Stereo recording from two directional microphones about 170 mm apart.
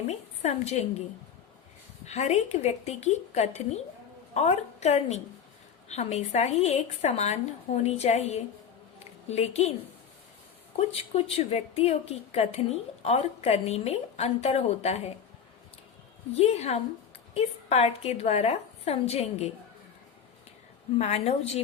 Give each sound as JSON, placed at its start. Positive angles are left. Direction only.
{"t": 0.1, "sound": "a woman's voice", "side_deg": 40}
{"t": 2.0, "sound": "a woman's voice", "side_deg": 40}
{"t": 10.8, "sound": "a woman's voice", "side_deg": 35}
{"t": 16.3, "sound": "a woman's voice", "side_deg": 40}
{"t": 21.0, "sound": "a woman's voice", "side_deg": 40}